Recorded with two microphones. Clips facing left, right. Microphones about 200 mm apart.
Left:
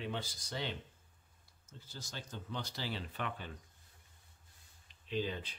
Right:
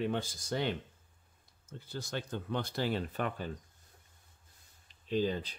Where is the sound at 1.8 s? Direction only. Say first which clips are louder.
Right 10 dB; 60° right (ahead or behind); by 3.5 s 45° right (ahead or behind).